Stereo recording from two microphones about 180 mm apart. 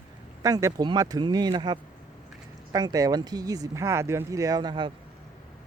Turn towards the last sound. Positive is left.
turn(degrees=-25)  # may be behind; listen again after turning